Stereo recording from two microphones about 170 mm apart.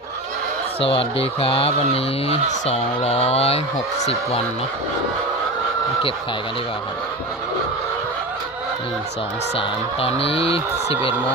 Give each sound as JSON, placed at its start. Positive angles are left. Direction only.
{"t": 0.8, "sound": "speech", "side_deg": 35}
{"t": 9.6, "sound": "speech", "side_deg": 35}